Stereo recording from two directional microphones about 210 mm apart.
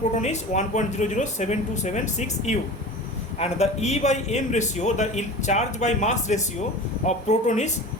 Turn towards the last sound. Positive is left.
turn(degrees=35)  # may be behind; listen again after turning